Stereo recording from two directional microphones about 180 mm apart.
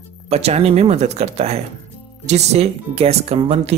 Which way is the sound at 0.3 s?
35° right (ahead or behind).